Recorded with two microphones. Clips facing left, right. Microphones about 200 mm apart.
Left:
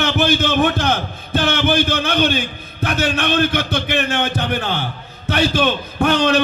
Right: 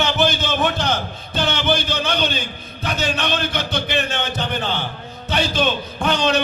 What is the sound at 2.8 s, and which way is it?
A man's voice, 55° left (ahead or behind).